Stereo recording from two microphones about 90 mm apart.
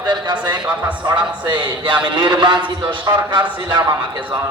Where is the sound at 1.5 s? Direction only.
65° right (ahead or behind).